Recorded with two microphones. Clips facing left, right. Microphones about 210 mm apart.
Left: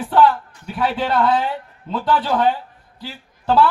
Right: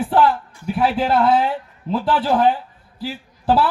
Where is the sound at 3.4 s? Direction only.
30° right (ahead or behind).